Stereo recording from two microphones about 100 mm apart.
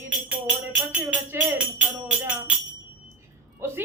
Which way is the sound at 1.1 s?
15° right (ahead or behind).